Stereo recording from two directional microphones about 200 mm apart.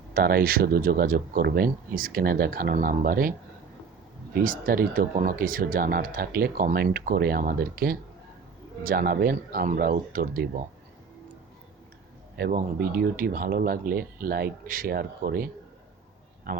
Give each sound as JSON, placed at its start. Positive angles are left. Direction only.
{"t": 0.1, "sound": "speech", "side_deg": -50}
{"t": 4.4, "sound": "speech", "side_deg": -45}
{"t": 12.4, "sound": "speech", "side_deg": -45}
{"t": 16.5, "sound": "a man's voice", "side_deg": -45}